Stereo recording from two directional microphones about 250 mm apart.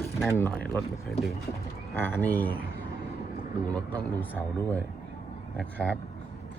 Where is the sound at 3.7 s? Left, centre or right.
Centre.